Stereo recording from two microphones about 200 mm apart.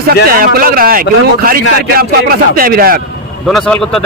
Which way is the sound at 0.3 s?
45° right (ahead or behind).